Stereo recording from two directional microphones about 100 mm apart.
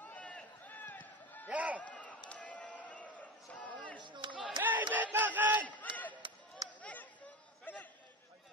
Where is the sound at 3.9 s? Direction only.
50° right (ahead or behind).